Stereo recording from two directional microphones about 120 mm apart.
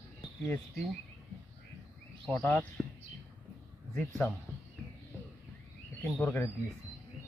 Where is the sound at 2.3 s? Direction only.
10° left (ahead or behind).